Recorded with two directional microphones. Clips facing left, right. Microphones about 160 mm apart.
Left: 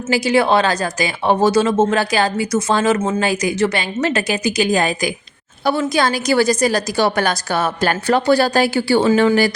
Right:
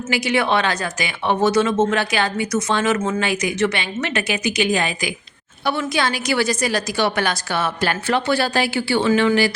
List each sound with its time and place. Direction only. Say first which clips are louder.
0.1 s speech: left 5 dB; 35° left (ahead or behind)